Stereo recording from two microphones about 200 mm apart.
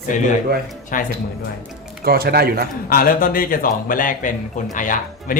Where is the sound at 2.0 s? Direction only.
50° right (ahead or behind).